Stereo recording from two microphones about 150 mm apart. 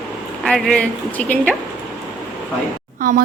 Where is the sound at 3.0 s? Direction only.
65° right (ahead or behind).